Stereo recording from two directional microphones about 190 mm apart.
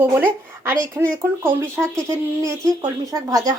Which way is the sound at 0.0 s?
10° right (ahead or behind).